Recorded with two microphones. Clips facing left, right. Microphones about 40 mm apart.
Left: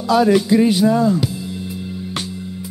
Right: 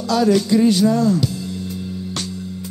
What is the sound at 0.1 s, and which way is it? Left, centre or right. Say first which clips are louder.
Music: left 2 dB; centre.